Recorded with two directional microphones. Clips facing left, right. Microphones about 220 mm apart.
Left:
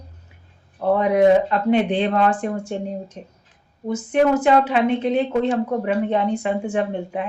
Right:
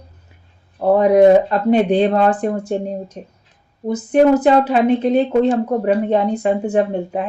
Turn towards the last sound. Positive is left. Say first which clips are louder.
# right 5 dB
turn(degrees=-40)  # may be behind; listen again after turning